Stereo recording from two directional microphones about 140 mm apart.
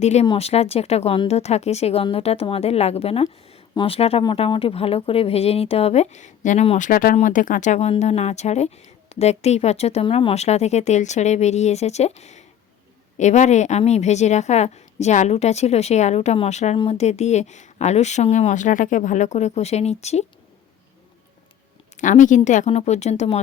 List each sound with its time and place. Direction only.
0.0 s a woman's voice: 55° left (ahead or behind)
6.7 s speech: 75° left (ahead or behind)
7.2 s a woman's voice: 70° left (ahead or behind); by 10.0 s 50° left (ahead or behind)
10.0 s a woman's voice: 40° left (ahead or behind)
16.7 s speech: 35° left (ahead or behind)
17.0 s speech: 50° left (ahead or behind)
21.9 s a woman's voice: 60° left (ahead or behind)